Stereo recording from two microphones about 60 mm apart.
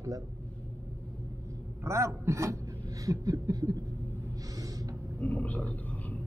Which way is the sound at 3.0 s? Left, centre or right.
Right.